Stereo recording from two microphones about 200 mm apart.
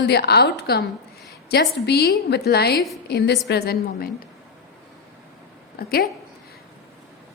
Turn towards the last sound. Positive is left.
turn(degrees=50)  # may be behind; listen again after turning